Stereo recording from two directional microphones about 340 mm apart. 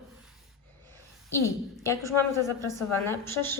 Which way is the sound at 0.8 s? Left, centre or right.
Centre.